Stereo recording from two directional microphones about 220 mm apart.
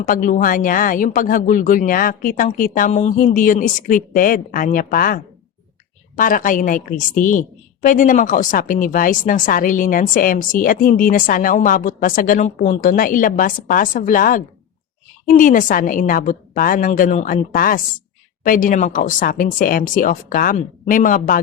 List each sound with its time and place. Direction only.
0.0 s a woman's voice: 40° left (ahead or behind)